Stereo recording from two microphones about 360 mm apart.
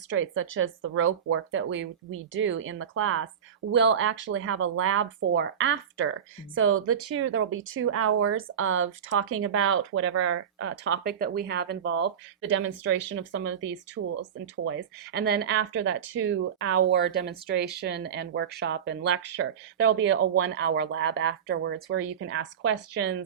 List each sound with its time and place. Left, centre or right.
0.1 s speech: right